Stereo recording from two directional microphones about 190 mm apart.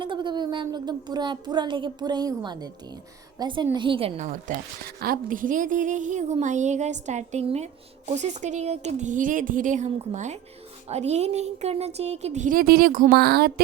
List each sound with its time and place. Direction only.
0.0 s a woman's voice: 25° right (ahead or behind)
4.9 s a woman's voice: 50° right (ahead or behind)